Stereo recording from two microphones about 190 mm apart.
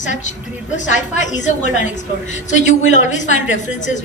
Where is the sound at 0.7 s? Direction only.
40° left (ahead or behind).